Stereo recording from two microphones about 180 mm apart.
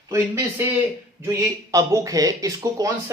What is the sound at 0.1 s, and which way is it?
Speech, 15° right (ahead or behind).